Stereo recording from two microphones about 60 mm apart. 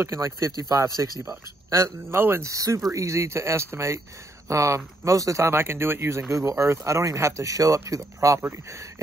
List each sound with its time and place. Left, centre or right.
0.0 s speech: right
0.5 s speech: right
1.7 s speech: right
2.4 s speech: right
8.4 s speech: right